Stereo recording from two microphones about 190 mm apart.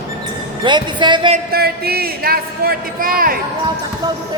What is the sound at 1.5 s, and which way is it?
A man's voice, 55° right (ahead or behind).